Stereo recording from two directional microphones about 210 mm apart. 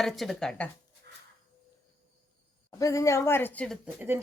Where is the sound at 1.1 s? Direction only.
50° right (ahead or behind).